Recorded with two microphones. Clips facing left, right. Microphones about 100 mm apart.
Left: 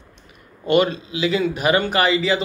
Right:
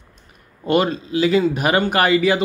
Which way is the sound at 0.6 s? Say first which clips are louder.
Even; 40° right (ahead or behind).